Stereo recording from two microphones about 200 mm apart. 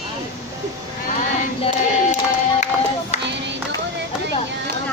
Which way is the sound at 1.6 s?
35° left (ahead or behind).